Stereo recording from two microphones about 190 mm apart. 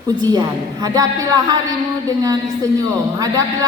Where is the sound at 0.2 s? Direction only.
20° right (ahead or behind).